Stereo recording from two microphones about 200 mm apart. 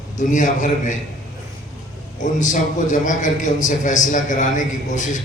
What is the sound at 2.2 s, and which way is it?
A man's voice, 40° left (ahead or behind).